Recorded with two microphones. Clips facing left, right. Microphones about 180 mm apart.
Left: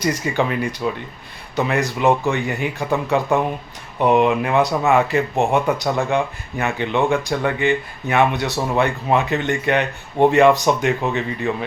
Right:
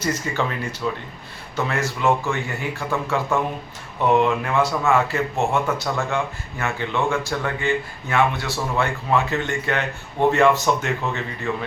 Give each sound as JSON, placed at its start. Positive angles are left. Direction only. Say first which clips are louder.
{"t": 0.0, "sound": "speech", "louder": "left 4 dB", "side_deg": 15}